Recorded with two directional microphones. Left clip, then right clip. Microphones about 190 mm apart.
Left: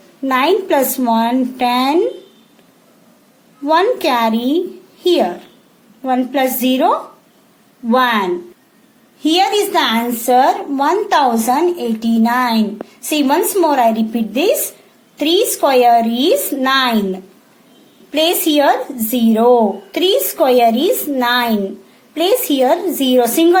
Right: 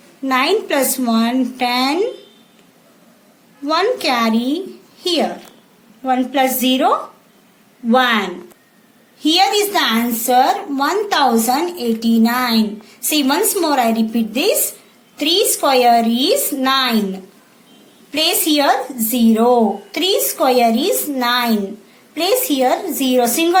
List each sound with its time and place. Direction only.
0.3 s a woman's voice: 45° left (ahead or behind)
3.7 s a woman's voice: 45° left (ahead or behind)